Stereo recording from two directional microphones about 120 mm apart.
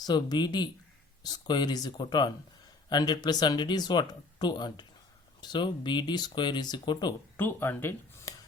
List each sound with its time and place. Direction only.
0.0 s speech: 35° left (ahead or behind)
7.3 s speech: 15° left (ahead or behind)
8.3 s a sound: 30° left (ahead or behind)